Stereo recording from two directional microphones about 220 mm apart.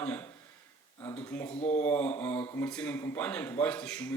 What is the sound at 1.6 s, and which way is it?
Speech, 30° left (ahead or behind).